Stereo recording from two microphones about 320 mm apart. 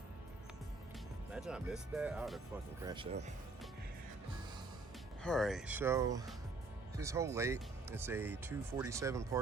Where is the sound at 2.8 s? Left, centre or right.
Centre.